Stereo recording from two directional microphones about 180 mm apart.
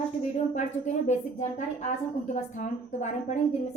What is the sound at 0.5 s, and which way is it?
A woman's voice, 40° left (ahead or behind).